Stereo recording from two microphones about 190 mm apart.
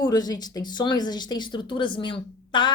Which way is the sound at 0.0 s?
20° left (ahead or behind).